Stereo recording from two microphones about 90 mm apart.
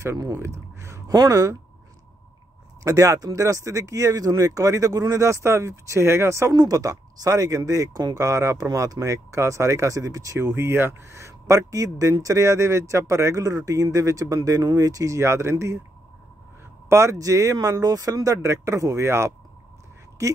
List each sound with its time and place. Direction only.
0.0 s speech: 35° right (ahead or behind)
2.8 s speech: 35° right (ahead or behind)
6.5 s speech: 40° right (ahead or behind)
16.9 s speech: 35° right (ahead or behind)